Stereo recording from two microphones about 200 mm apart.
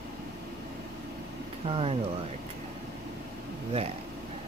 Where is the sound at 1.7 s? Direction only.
30° right (ahead or behind).